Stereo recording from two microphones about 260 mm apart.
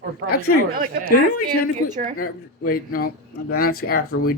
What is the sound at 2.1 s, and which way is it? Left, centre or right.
Speech, left.